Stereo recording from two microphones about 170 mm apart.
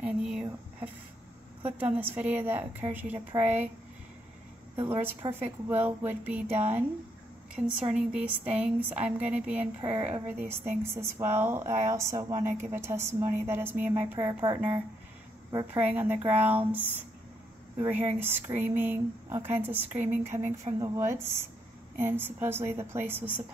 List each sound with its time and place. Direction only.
0.0 s speech: 5° right (ahead or behind)
2.0 s speech: 10° right (ahead or behind)
5.4 s speech: 10° right (ahead or behind)
17.8 s speech: 10° right (ahead or behind)